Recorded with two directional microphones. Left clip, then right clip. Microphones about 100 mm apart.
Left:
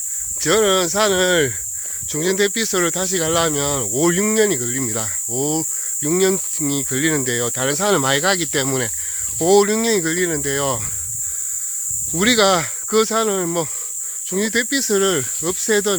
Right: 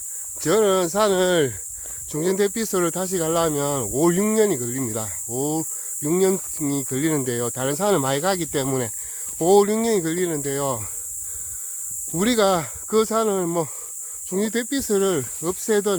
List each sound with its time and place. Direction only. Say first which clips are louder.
0.3 s speech: left 2 dB; 35° right (ahead or behind)
3.9 s speech: left 2 dB; 40° right (ahead or behind); by 10.8 s 20° right (ahead or behind)
12.1 s speech: left 4 dB; 20° right (ahead or behind)
13.0 s speech: left 2 dB; 30° right (ahead or behind)